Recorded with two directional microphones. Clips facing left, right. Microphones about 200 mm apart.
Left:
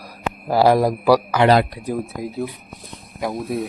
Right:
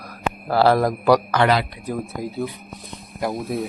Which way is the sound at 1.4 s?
40° left (ahead or behind).